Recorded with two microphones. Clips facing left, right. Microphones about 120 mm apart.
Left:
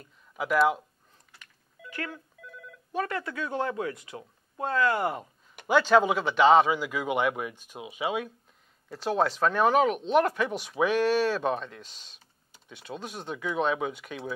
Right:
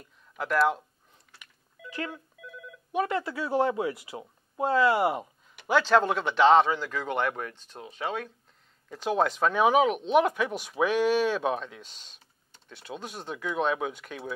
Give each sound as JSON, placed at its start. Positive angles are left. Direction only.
{"t": 0.0, "sound": "speech", "side_deg": 0}
{"t": 1.9, "sound": "speech", "side_deg": -20}
{"t": 2.1, "sound": "telephone bell ringing", "side_deg": -5}
{"t": 2.9, "sound": "speech", "side_deg": -20}
{"t": 5.7, "sound": "speech", "side_deg": 5}